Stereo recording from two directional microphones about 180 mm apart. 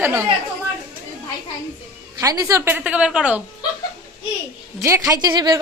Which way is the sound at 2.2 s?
20° right (ahead or behind).